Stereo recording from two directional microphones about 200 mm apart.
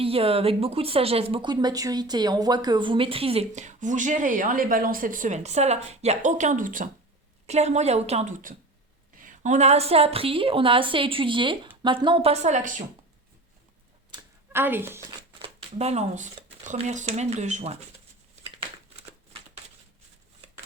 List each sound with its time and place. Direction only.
0.0 s a woman's voice: 30° right (ahead or behind)
14.5 s a woman's voice: 10° right (ahead or behind)
15.4 s speech: 30° right (ahead or behind)